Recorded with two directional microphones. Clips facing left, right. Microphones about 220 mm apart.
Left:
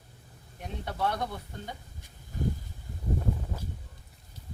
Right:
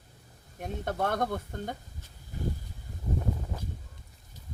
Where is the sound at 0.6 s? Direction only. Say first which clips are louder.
Right 2 dB; 50° right (ahead or behind).